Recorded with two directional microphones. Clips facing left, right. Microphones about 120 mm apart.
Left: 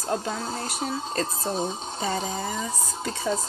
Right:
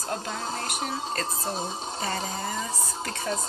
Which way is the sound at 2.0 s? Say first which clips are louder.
Left 3 dB; 5° left (ahead or behind).